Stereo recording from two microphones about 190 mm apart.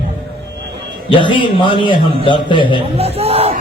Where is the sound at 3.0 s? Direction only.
30° right (ahead or behind).